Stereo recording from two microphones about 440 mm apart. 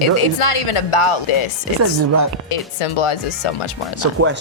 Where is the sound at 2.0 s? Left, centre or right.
Right.